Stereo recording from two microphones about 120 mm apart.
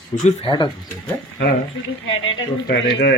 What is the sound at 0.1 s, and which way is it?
Speech, 90° left.